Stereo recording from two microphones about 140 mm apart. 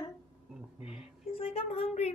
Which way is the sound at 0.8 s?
45° left (ahead or behind).